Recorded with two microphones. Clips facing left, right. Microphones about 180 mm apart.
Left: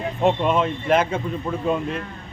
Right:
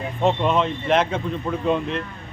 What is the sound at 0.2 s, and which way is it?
A man's voice, 5° left (ahead or behind).